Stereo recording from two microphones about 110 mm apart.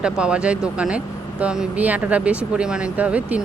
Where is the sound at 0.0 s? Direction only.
10° right (ahead or behind).